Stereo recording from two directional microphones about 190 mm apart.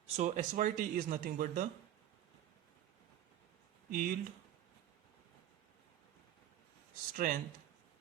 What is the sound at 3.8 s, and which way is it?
Speech, 50° right (ahead or behind).